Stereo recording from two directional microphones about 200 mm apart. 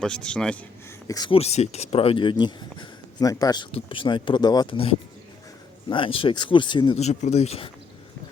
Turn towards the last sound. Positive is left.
turn(degrees=30)  # may be behind; listen again after turning